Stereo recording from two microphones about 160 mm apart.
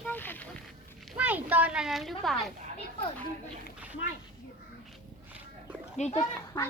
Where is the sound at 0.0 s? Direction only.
10° left (ahead or behind).